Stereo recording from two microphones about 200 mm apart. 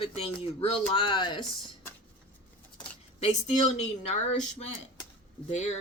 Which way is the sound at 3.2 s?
35° left (ahead or behind).